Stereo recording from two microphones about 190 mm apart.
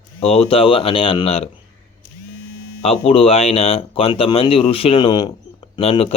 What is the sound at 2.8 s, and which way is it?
Speech, 30° left (ahead or behind).